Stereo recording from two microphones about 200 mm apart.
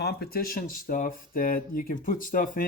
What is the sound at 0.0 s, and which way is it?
Speech, 50° left (ahead or behind).